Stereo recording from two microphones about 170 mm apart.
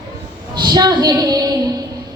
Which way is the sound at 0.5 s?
25° right (ahead or behind).